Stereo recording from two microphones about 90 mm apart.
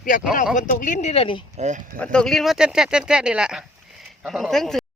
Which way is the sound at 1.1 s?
80° left.